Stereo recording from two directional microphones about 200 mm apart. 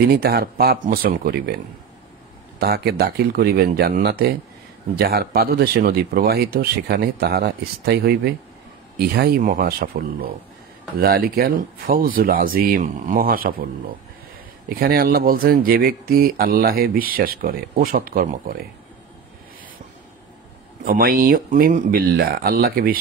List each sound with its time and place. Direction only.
0.1 s speech: 50° right (ahead or behind)
2.6 s speech: 50° right (ahead or behind)
14.8 s speech: 50° right (ahead or behind)
20.8 s speech: 45° right (ahead or behind)